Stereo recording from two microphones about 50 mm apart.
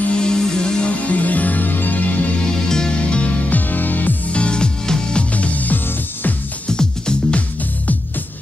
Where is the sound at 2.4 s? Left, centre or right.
Centre; by 4.2 s left.